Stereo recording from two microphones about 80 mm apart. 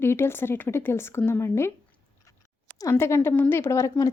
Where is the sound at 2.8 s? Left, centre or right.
Left.